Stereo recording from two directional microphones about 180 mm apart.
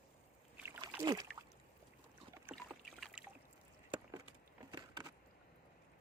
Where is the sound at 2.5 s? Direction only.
Centre (ahead or behind).